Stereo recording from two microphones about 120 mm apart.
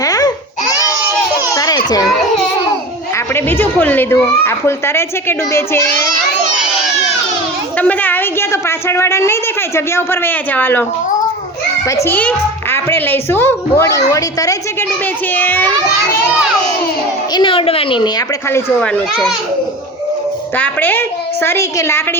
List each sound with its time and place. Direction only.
0.0 s babbling: 30° left (ahead or behind)
1.5 s a sound: 30° left (ahead or behind)
3.3 s a woman's voice: 15° left (ahead or behind)
7.8 s a woman's voice: 15° left (ahead or behind)
12.0 s a woman's voice: 15° left (ahead or behind)
15.3 s a woman's voice: 15° left (ahead or behind)
17.3 s a woman's voice: 45° left (ahead or behind)
20.6 s a woman's voice: 15° left (ahead or behind)